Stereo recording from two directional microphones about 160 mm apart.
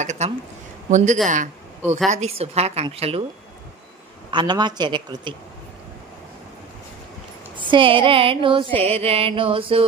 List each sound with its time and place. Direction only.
0.0 s speech: 45° right (ahead or behind)
2.0 s a woman's voice: 45° right (ahead or behind)
4.3 s speech: 30° right (ahead or behind)
7.5 s a woman's voice: 30° right (ahead or behind)